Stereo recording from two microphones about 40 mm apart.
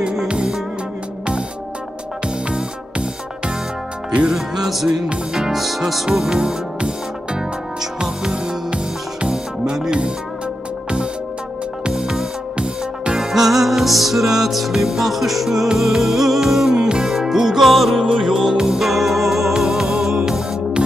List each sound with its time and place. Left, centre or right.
0.0 s music: right
2.2 s music: right
4.3 s music: centre
5.5 s music: centre
6.3 s music: centre
11.9 s music: centre
12.5 s music: right
13.2 s music: centre
18.0 s music: centre